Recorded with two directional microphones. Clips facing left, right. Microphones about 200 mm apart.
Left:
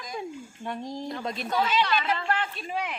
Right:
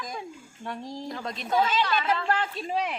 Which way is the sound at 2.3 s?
40° right (ahead or behind).